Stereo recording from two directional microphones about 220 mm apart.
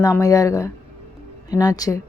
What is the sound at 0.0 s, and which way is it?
A woman's voice, 15° left (ahead or behind).